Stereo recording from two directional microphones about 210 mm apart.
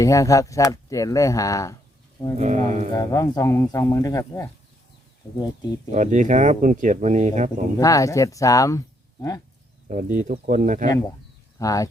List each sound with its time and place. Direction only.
0.0 s speech: 15° left (ahead or behind)
2.4 s speech: 35° right (ahead or behind)
2.9 s speech: 15° left (ahead or behind)
5.9 s speech: 35° right (ahead or behind)
7.8 s speech: 15° left (ahead or behind)
9.9 s speech: 35° right (ahead or behind)
11.6 s speech: 15° left (ahead or behind)